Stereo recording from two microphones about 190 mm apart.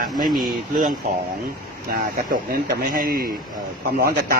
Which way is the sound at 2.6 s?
50° right (ahead or behind).